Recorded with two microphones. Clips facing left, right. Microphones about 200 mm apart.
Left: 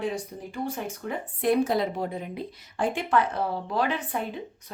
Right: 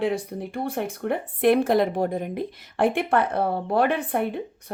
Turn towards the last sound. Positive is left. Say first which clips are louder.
# right 6 dB
turn(degrees=-60)  # may be behind; listen again after turning